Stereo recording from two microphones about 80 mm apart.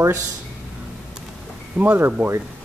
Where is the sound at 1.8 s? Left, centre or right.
Right.